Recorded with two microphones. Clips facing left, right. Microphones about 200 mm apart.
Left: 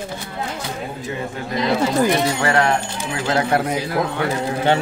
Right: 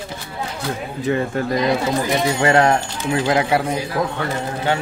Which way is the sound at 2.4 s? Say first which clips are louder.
Right 3 dB; 25° right (ahead or behind).